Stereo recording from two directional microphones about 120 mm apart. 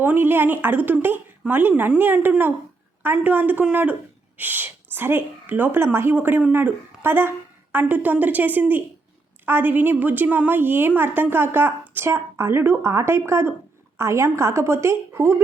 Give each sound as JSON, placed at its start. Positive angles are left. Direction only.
{"t": 0.0, "sound": "a woman's voice", "side_deg": -15}